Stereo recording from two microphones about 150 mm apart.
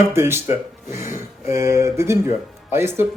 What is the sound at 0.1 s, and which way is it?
Speech, 15° right (ahead or behind).